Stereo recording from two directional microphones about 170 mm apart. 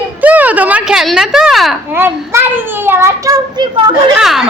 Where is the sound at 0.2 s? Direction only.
10° right (ahead or behind).